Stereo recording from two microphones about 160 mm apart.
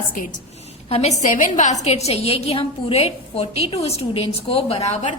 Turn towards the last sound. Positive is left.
turn(degrees=45)  # may be behind; listen again after turning